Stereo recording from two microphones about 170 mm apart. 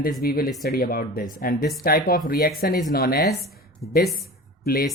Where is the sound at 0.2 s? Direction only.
60° left (ahead or behind).